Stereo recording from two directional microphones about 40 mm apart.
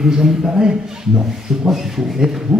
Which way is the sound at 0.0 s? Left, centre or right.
Centre.